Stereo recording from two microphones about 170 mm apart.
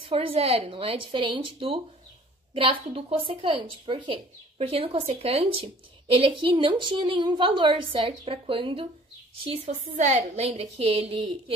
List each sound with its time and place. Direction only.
0.0 s a woman's voice: 30° right (ahead or behind)